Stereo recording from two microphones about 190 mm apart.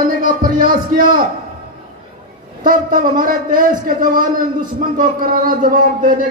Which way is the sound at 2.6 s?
45° right (ahead or behind).